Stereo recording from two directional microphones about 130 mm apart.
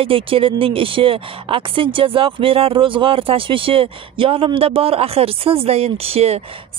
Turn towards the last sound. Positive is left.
turn(degrees=-50)  # may be behind; listen again after turning